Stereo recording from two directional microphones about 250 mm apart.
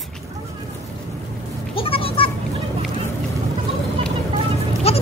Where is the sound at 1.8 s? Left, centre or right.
Left.